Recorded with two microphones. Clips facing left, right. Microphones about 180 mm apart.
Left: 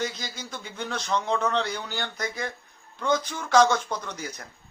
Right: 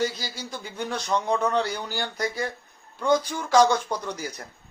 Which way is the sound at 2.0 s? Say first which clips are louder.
Right 3 dB; 35° right (ahead or behind).